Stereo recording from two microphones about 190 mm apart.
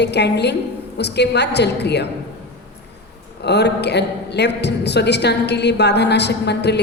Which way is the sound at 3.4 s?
60° left (ahead or behind).